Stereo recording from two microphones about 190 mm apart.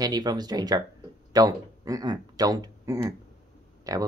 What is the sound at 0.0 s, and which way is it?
Speech, 20° right (ahead or behind).